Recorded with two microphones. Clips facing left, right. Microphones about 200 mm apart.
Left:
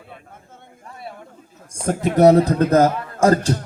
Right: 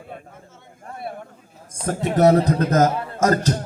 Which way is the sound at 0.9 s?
50° right (ahead or behind).